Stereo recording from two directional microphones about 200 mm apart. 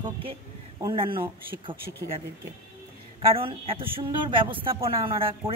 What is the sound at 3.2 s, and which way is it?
A woman's voice, 25° right (ahead or behind).